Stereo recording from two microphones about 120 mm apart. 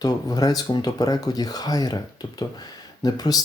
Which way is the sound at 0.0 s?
30° left (ahead or behind).